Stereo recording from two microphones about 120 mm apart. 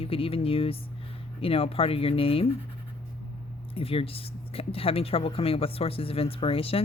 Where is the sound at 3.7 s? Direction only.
50° left (ahead or behind).